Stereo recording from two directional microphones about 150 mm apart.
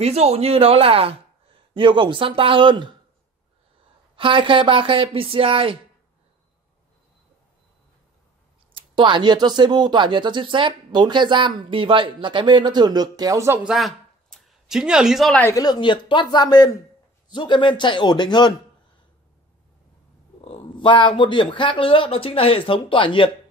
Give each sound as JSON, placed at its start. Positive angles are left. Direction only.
{"t": 0.0, "sound": "speech", "side_deg": -45}
{"t": 4.2, "sound": "speech", "side_deg": -35}
{"t": 8.7, "sound": "speech", "side_deg": -30}
{"t": 13.7, "sound": "a sound", "side_deg": 0}
{"t": 15.5, "sound": "a man's voice", "side_deg": 25}
{"t": 20.4, "sound": "a man's voice", "side_deg": 35}